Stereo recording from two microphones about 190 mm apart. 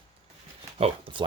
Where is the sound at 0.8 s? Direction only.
30° right (ahead or behind).